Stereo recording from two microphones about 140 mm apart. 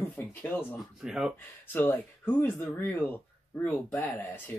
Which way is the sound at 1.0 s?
5° right (ahead or behind).